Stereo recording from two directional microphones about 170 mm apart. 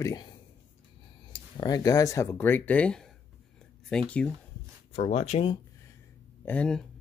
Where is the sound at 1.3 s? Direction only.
25° left (ahead or behind); by 4.3 s 5° left (ahead or behind).